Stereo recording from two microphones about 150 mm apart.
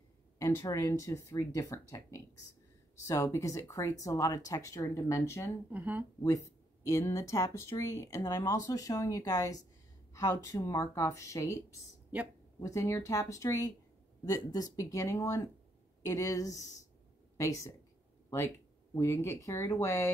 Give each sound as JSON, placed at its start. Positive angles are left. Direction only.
{"t": 0.4, "sound": "speech", "side_deg": 20}
{"t": 5.7, "sound": "speech", "side_deg": -10}
{"t": 6.2, "sound": "speech", "side_deg": 20}
{"t": 18.9, "sound": "speech", "side_deg": 15}